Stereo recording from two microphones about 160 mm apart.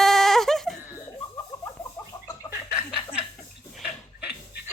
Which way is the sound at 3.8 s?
5° right (ahead or behind).